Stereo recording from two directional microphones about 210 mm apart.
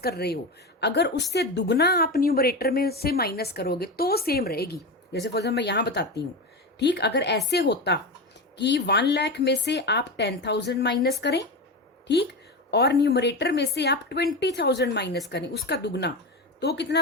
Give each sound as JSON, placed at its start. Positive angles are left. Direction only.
{"t": 0.0, "sound": "a woman's voice", "side_deg": 50}